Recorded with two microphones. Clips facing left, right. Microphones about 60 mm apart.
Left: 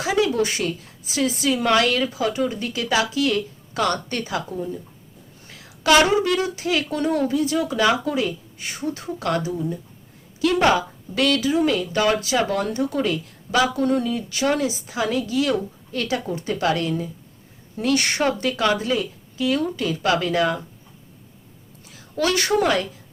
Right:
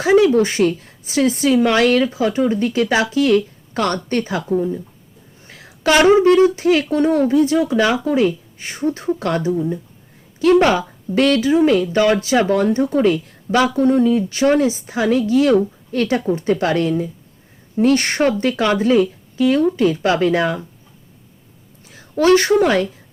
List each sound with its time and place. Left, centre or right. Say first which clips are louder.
0.0 s speech: right 8 dB; right
21.8 s a woman's voice: right 9 dB; right